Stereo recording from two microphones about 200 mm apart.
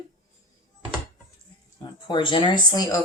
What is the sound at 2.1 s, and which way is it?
Speech, 25° left (ahead or behind).